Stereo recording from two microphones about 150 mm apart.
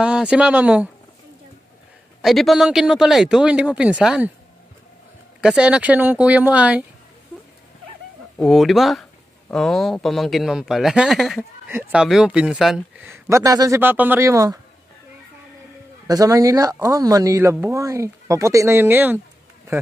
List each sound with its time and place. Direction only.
0.0 s speech: 5° right (ahead or behind)
2.2 s speech: centre (ahead or behind)
5.4 s speech: 5° right (ahead or behind)
8.4 s speech: centre (ahead or behind)
13.0 s speech: 20° right (ahead or behind)
16.1 s speech: 25° right (ahead or behind)